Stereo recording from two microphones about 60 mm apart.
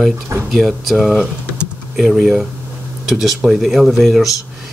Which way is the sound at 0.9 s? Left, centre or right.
Centre.